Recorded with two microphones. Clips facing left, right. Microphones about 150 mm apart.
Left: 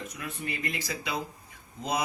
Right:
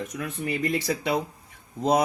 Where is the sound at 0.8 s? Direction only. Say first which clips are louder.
Right 9 dB; 70° right (ahead or behind).